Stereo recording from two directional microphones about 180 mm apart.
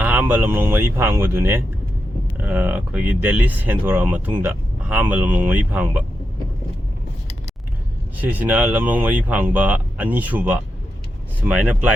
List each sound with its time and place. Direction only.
0.0 s speech: 10° right (ahead or behind)
8.2 s speech: 10° right (ahead or behind)